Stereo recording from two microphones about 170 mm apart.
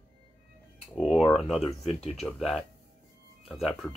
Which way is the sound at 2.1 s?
Centre (ahead or behind).